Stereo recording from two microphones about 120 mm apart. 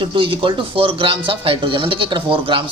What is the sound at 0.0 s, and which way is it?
A man's voice, 45° right (ahead or behind).